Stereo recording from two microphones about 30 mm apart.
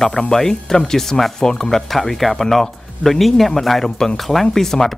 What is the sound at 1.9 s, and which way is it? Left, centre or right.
Speech, centre.